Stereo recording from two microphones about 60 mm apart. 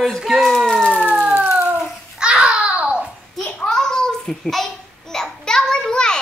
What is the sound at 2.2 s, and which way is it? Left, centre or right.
Babbling, centre.